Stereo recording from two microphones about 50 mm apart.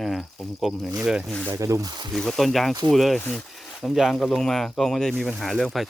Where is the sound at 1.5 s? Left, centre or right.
Right.